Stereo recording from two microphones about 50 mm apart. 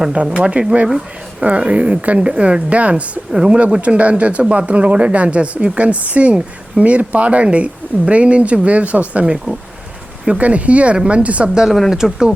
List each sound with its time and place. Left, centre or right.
0.3 s speech: centre
2.9 s speech: centre
3.8 s speech: right
9.2 s speech: centre
11.4 s speech: centre